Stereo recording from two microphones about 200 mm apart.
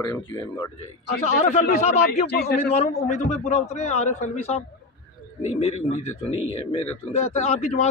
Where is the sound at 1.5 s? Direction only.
35° left (ahead or behind).